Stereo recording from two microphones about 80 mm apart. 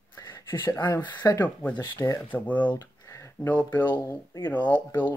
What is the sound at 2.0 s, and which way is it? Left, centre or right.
Speech, left.